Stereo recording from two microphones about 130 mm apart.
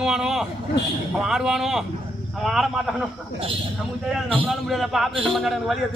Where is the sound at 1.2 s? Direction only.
5° right (ahead or behind).